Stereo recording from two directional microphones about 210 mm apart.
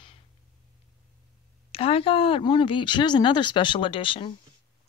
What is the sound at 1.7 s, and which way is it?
Speech, 25° left (ahead or behind).